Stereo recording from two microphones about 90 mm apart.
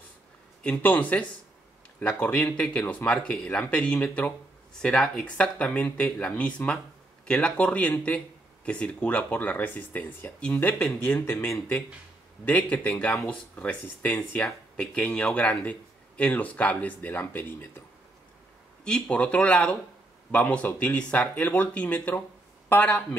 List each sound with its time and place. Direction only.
0.6 s speech: 15° left (ahead or behind)
11.1 s a man's voice: 30° left (ahead or behind)
12.4 s speech: 15° left (ahead or behind)
18.9 s a man's voice: 10° left (ahead or behind)